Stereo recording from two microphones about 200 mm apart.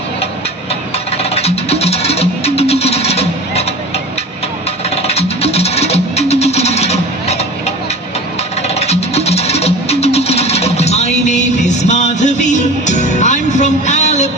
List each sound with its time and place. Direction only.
1.1 s music: 30° left (ahead or behind)
5.0 s music: 30° left (ahead or behind)
8.6 s music: 30° left (ahead or behind)